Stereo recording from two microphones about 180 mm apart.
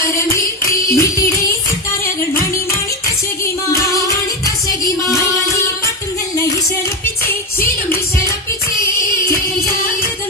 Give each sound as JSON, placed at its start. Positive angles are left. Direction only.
{"t": 0.2, "sound": "music", "side_deg": 15}